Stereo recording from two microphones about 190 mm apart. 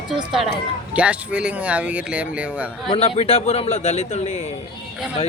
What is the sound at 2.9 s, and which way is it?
A man's voice, 30° left (ahead or behind).